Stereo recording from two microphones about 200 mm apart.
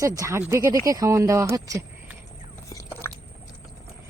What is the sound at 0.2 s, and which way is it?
Speech, 15° right (ahead or behind).